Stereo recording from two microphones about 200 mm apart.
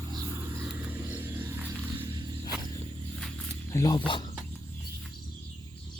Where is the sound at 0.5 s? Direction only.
10° right (ahead or behind).